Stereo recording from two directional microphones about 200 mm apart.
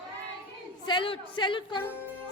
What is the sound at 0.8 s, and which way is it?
Speech, 25° left (ahead or behind).